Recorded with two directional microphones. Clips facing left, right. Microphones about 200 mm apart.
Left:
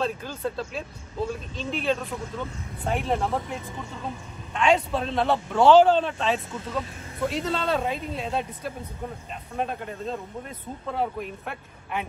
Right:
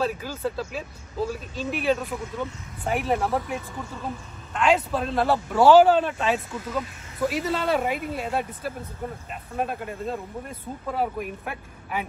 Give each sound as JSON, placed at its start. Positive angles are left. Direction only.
{"t": 0.0, "sound": "speech", "side_deg": -5}
{"t": 4.6, "sound": "speech", "side_deg": 0}